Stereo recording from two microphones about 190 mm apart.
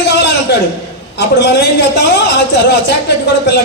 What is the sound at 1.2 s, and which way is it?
A man's voice, 60° left (ahead or behind).